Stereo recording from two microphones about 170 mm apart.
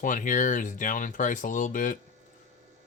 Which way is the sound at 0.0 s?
50° left (ahead or behind).